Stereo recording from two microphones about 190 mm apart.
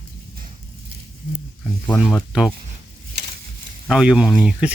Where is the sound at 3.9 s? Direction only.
5° right (ahead or behind).